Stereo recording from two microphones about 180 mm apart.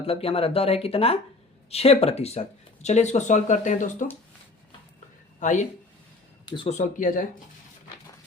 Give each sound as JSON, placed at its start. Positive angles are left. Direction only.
{"t": 0.0, "sound": "speech", "side_deg": 30}
{"t": 5.4, "sound": "speech", "side_deg": 45}
{"t": 6.4, "sound": "a sound", "side_deg": 25}
{"t": 6.7, "sound": "speech", "side_deg": 45}